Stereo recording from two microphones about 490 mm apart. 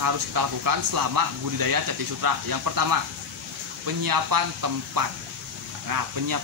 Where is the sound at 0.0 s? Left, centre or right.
Right.